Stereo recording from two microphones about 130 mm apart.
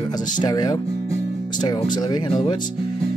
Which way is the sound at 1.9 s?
35° left (ahead or behind).